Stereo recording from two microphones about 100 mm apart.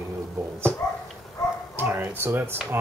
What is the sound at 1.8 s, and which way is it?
Speech, 20° right (ahead or behind).